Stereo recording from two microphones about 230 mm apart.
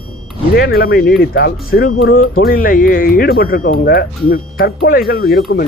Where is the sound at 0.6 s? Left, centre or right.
Left.